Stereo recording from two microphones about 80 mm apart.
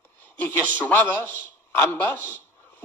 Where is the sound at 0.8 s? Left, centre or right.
Left.